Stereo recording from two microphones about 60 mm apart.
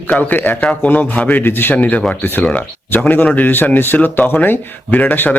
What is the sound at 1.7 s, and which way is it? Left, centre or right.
Speech, left.